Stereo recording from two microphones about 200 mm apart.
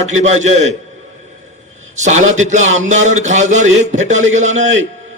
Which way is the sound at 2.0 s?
35° right (ahead or behind).